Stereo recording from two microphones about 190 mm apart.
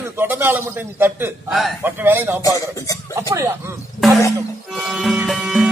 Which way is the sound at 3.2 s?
15° right (ahead or behind).